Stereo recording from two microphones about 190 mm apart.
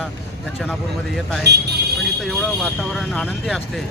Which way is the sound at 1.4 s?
60° right (ahead or behind).